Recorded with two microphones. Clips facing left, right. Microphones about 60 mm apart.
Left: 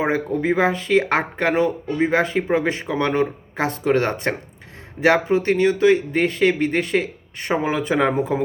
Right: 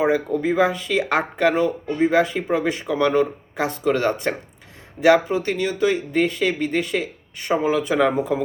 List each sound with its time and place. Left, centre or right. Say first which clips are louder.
0.0 s a man's voice: right 1 dB; left